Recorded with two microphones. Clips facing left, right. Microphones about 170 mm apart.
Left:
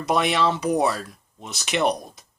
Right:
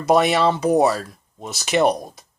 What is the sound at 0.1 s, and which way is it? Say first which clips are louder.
Speech: right 5 dB; 45° right (ahead or behind).